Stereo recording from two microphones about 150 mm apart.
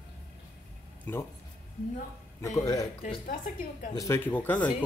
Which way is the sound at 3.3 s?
60° left (ahead or behind).